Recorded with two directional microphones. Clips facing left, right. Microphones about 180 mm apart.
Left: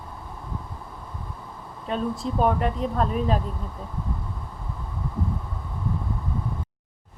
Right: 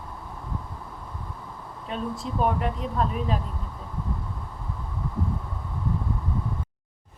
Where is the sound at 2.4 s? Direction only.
35° left (ahead or behind).